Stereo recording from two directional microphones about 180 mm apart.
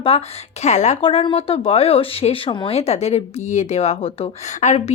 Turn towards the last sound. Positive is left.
turn(degrees=40)  # may be behind; listen again after turning